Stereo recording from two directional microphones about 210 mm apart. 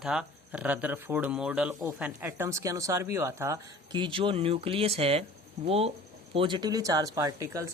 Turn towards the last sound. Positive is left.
turn(degrees=-15)  # may be behind; listen again after turning